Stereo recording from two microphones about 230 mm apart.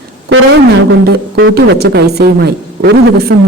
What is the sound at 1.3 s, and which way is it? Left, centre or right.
A man's voice, right.